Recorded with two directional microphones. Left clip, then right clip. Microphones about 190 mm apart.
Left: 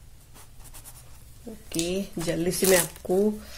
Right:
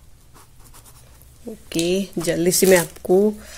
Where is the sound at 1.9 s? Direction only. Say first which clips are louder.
Right 9 dB; 45° right (ahead or behind).